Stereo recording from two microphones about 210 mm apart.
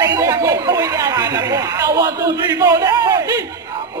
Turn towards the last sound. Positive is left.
turn(degrees=-15)  # may be behind; listen again after turning